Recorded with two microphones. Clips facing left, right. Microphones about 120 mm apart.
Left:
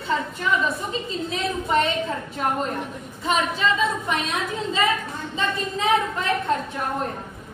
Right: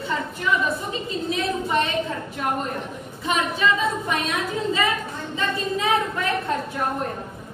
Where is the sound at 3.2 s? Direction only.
25° left (ahead or behind).